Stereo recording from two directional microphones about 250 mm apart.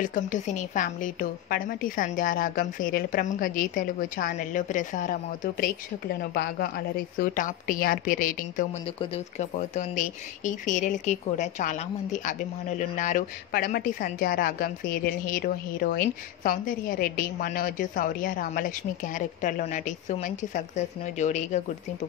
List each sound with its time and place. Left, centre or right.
0.0 s speech: left
8.8 s speech: left